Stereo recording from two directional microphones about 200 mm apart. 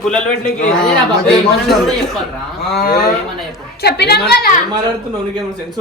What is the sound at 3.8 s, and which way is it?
Speech, 55° left (ahead or behind).